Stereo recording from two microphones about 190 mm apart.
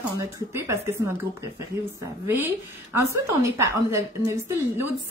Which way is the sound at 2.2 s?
10° right (ahead or behind).